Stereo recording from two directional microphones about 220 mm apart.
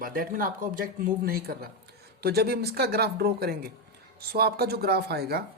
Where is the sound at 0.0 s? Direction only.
40° right (ahead or behind).